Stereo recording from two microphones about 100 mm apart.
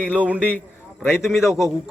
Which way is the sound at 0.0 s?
15° left (ahead or behind).